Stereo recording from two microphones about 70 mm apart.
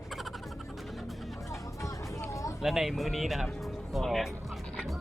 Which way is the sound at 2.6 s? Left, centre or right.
Centre.